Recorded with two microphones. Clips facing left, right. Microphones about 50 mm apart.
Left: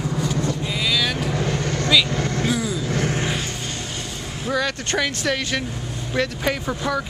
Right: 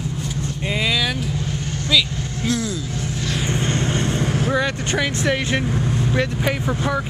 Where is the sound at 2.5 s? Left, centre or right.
Centre.